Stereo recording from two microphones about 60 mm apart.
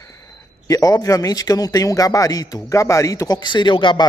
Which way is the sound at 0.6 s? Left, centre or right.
Left.